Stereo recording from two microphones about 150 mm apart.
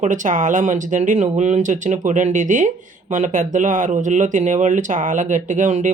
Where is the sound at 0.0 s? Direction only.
60° right (ahead or behind).